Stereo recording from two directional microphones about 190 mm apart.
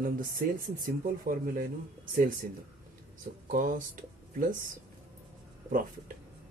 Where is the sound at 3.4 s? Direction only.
45° right (ahead or behind).